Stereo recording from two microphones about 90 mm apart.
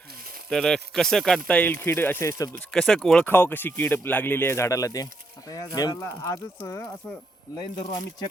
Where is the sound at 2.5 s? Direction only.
10° left (ahead or behind).